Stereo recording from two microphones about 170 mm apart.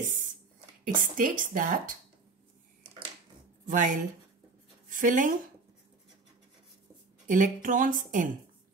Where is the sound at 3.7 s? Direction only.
50° right (ahead or behind).